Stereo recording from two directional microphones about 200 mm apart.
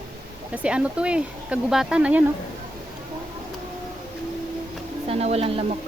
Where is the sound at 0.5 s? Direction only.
5° right (ahead or behind).